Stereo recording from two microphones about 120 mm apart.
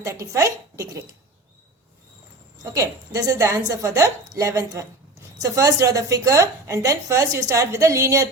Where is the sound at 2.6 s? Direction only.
30° right (ahead or behind).